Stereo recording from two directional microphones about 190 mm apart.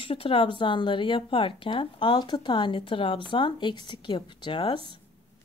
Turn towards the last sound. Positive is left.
turn(degrees=25)  # may be behind; listen again after turning